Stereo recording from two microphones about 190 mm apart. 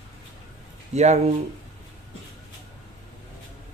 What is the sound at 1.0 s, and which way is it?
Speech, 35° right (ahead or behind).